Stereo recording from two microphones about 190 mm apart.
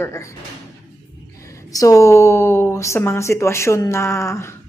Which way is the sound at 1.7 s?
15° left (ahead or behind).